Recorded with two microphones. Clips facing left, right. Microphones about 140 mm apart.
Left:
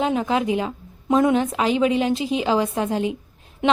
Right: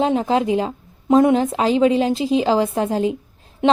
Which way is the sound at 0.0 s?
30° right (ahead or behind).